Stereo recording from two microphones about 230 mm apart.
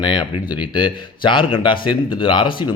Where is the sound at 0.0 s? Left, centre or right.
Centre.